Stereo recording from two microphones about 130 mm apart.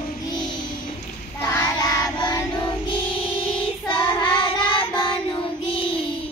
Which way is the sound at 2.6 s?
40° left (ahead or behind).